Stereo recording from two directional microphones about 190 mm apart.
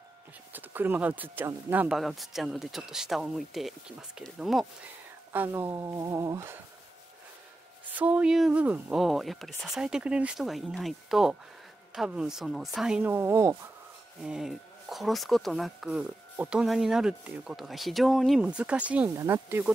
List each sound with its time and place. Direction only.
0.5 s speech: 10° right (ahead or behind)
7.9 s speech: 5° right (ahead or behind)
14.2 s speech: 5° right (ahead or behind)